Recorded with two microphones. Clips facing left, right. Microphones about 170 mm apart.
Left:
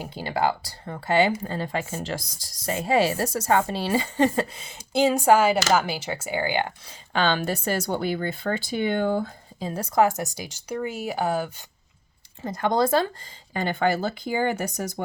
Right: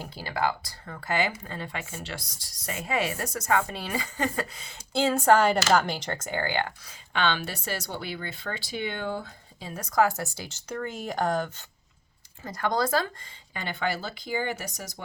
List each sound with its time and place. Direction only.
0.0 s speech: 20° left (ahead or behind)
6.8 s a woman's voice: 40° left (ahead or behind); by 11.6 s 10° left (ahead or behind)
12.4 s speech: 25° left (ahead or behind)
13.5 s speech: 45° left (ahead or behind)